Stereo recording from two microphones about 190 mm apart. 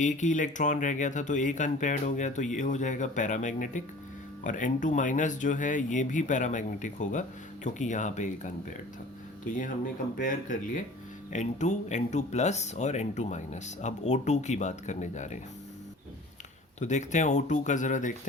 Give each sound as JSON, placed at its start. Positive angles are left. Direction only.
{"t": 0.0, "sound": "speech", "side_deg": 40}
{"t": 10.2, "sound": "speech", "side_deg": 45}
{"t": 16.8, "sound": "speech", "side_deg": 40}